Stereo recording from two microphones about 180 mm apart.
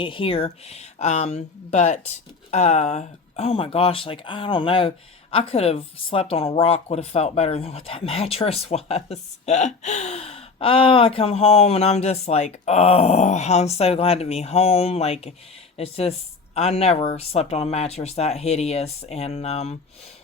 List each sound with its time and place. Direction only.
0.0 s speech: 30° left (ahead or behind)